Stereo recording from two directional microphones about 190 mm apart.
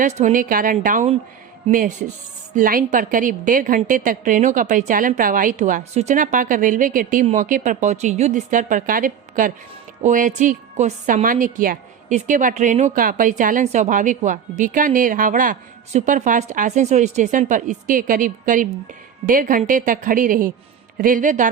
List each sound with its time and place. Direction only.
0.0 s a woman's voice: 40° right (ahead or behind)